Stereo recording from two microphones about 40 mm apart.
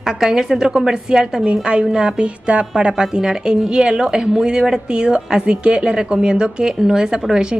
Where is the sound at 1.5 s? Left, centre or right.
Right.